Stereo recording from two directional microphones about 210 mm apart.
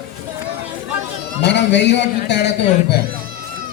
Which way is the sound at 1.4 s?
55° left (ahead or behind).